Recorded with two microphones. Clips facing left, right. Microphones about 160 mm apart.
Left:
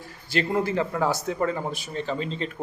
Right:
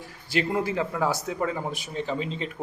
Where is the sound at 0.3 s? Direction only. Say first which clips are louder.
Left 1 dB; 10° right (ahead or behind).